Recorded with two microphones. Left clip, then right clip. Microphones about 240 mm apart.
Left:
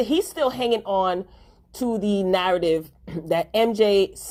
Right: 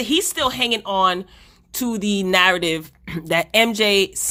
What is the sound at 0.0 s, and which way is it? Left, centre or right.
Speech, right.